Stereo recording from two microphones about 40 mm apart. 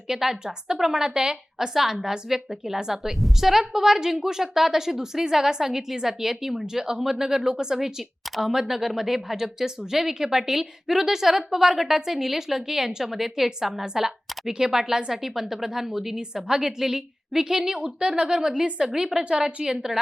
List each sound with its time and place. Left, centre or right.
0.1 s a woman's voice: centre
17.7 s a woman's voice: right